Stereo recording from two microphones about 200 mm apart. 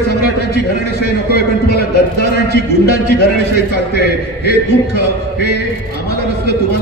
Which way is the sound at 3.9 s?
55° left (ahead or behind).